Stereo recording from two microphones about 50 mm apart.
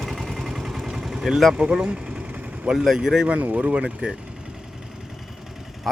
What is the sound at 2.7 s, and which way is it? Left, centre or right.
Speech, centre.